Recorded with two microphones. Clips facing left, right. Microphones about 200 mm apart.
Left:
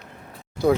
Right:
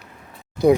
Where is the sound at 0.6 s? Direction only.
15° right (ahead or behind).